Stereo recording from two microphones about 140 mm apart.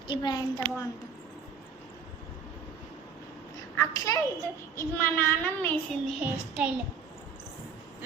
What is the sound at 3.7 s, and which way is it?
Speech, 20° left (ahead or behind).